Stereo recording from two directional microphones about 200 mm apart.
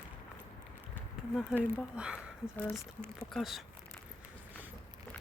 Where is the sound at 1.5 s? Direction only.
5° right (ahead or behind).